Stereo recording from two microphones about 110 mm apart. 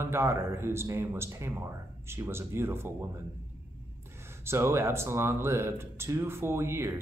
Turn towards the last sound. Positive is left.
turn(degrees=-20)  # may be behind; listen again after turning